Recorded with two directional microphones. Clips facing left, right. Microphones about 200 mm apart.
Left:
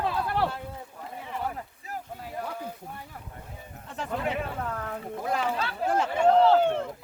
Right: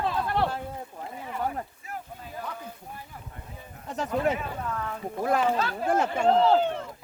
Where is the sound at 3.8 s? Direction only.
40° right (ahead or behind).